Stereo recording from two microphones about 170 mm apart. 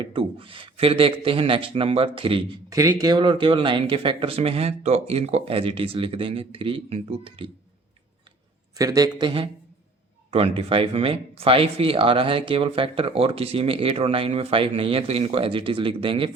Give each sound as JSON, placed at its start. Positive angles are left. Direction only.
{"t": 0.0, "sound": "speech", "side_deg": -30}
{"t": 2.6, "sound": "speech", "side_deg": -20}
{"t": 8.7, "sound": "speech", "side_deg": -20}